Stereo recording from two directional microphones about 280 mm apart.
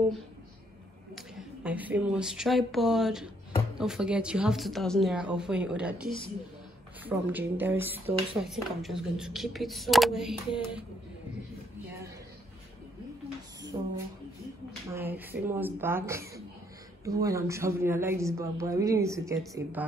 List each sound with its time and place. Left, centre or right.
1.1 s a woman's voice: centre
13.7 s a sound: centre
14.9 s a woman's voice: centre